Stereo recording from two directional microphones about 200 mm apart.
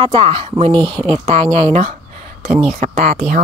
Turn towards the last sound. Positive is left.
turn(degrees=-40)  # may be behind; listen again after turning